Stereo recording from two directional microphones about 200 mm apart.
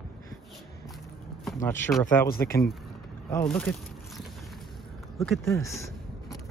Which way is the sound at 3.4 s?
5° left (ahead or behind).